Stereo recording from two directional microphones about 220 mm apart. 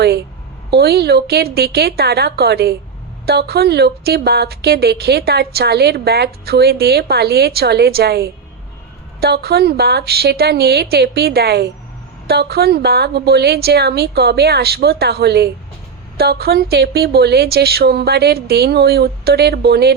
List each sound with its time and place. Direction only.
0.0 s a woman's voice: 45° right (ahead or behind)